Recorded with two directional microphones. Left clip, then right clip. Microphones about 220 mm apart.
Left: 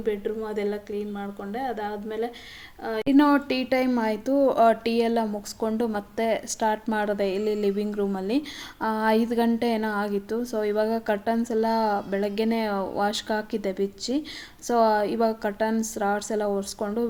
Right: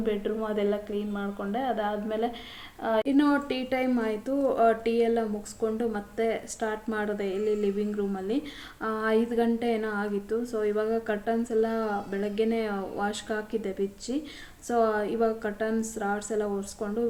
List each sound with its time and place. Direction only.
0.0 s a woman's voice: 45° left (ahead or behind)